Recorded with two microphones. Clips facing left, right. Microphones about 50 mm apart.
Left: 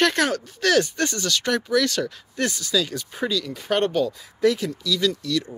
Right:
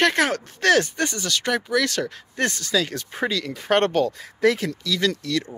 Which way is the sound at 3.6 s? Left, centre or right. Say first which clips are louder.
Right 3 dB; right.